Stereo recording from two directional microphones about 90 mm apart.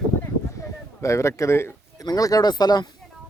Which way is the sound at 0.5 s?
35° left (ahead or behind).